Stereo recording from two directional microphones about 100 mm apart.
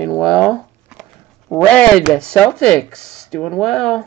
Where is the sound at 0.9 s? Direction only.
5° right (ahead or behind).